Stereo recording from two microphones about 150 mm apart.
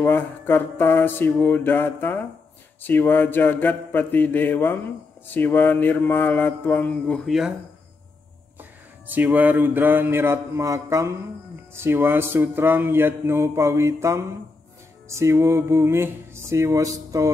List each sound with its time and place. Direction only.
0.0 s mantra: 15° left (ahead or behind)
7.2 s speech: 5° right (ahead or behind)
8.5 s music: 10° right (ahead or behind)
15.0 s speech: 20° right (ahead or behind)